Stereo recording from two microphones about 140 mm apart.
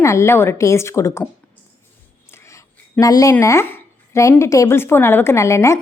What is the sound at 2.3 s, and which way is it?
Whispering, 20° left (ahead or behind).